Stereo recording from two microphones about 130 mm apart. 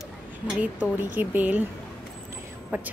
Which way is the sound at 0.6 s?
15° right (ahead or behind).